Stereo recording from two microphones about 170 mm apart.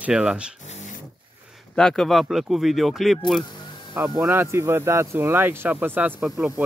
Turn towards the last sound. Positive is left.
turn(degrees=-10)  # may be behind; listen again after turning